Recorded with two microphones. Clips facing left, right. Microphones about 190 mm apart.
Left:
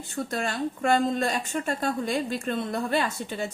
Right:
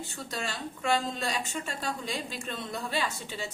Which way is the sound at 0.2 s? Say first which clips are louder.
Left 9 dB; 55° left (ahead or behind).